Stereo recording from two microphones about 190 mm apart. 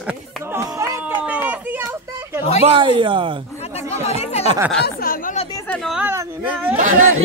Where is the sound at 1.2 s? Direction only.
10° right (ahead or behind).